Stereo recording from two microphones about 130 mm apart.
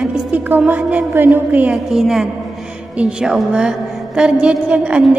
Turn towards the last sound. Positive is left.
turn(degrees=-10)  # may be behind; listen again after turning